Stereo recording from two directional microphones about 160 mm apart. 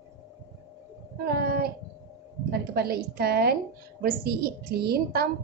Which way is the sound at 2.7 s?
80° right.